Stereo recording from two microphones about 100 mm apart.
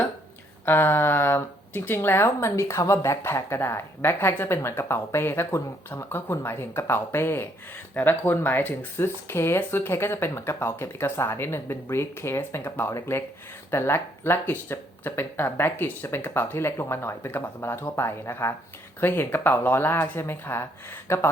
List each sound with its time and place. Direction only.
0.6 s speech: 20° left (ahead or behind)